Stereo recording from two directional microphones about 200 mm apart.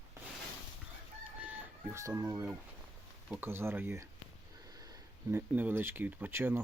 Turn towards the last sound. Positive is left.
turn(degrees=-10)  # may be behind; listen again after turning